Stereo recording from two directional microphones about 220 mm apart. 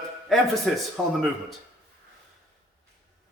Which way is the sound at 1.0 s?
Centre (ahead or behind).